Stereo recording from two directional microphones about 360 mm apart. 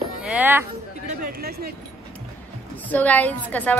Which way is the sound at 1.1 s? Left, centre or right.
Right.